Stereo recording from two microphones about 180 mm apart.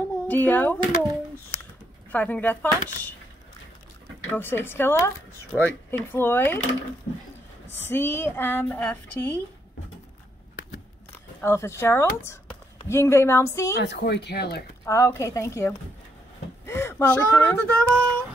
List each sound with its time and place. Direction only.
0.3 s a woman's voice: 10° left (ahead or behind)
2.1 s a woman's voice: 10° left (ahead or behind)
4.3 s a woman's voice: 10° left (ahead or behind)
7.7 s a woman's voice: 10° left (ahead or behind)
11.4 s a woman's voice: 15° left (ahead or behind)
13.7 s speech: 75° left (ahead or behind)
14.9 s a woman's voice: 15° left (ahead or behind)